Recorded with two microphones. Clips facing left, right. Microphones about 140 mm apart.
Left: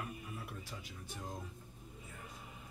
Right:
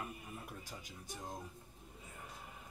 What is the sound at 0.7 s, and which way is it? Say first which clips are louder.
Speech: left 1 dB; 40° right (ahead or behind).